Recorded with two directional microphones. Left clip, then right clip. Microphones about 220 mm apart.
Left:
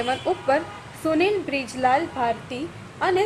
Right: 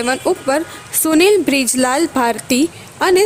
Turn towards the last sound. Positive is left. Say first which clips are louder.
# right 8 dB
turn(degrees=-50)  # may be behind; listen again after turning